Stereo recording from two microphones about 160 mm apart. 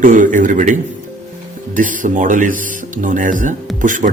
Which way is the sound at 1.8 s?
55° right (ahead or behind).